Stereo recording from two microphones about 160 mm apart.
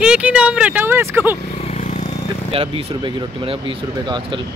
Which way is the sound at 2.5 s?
35° right (ahead or behind).